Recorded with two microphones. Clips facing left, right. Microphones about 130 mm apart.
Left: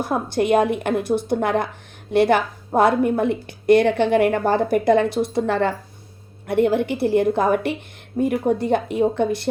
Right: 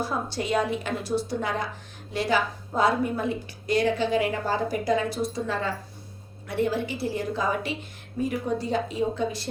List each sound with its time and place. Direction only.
0.0 s a woman's voice: 55° left (ahead or behind)